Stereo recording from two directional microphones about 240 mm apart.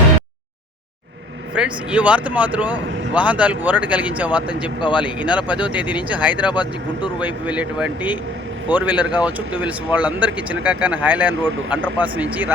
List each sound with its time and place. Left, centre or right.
1.5 s speech: centre
6.5 s speech: centre
7.2 s speech: centre